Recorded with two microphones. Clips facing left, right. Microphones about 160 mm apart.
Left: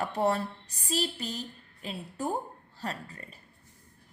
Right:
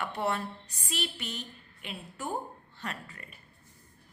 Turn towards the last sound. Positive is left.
turn(degrees=35)  # may be behind; listen again after turning